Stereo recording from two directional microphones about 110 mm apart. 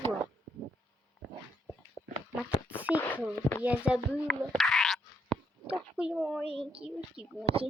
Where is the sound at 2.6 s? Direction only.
15° right (ahead or behind).